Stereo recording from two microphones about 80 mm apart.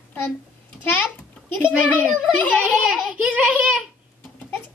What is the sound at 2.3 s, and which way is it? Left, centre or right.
Speech, centre.